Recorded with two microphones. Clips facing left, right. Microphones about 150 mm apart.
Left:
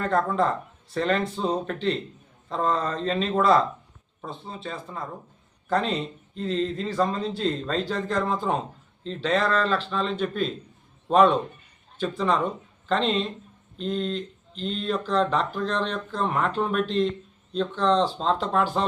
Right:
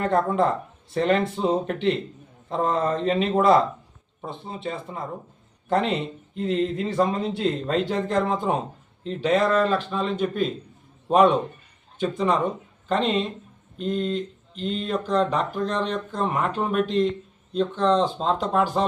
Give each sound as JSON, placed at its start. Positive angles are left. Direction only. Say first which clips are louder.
{"t": 0.0, "sound": "speech", "louder": "right 2 dB", "side_deg": -20}
{"t": 13.8, "sound": "speech", "louder": "right 2 dB", "side_deg": -5}